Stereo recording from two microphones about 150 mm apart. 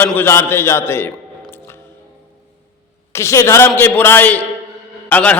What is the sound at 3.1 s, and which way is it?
A man's voice, 20° left (ahead or behind).